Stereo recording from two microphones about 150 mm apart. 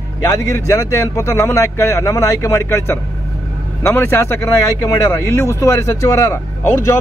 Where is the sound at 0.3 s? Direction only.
20° left (ahead or behind).